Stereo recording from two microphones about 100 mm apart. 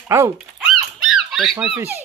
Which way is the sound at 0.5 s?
Centre (ahead or behind).